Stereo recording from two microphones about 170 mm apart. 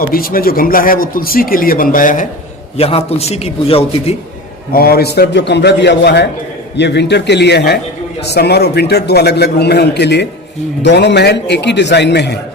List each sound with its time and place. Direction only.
0.1 s speech: 60° left (ahead or behind)
2.7 s a man's voice: 35° left (ahead or behind)
4.7 s a man's voice: 60° left (ahead or behind); by 12.4 s 85° left